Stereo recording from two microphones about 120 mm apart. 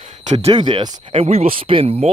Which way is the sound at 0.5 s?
40° right (ahead or behind).